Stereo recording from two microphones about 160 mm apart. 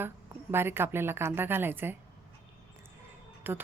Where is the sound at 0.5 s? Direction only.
15° right (ahead or behind).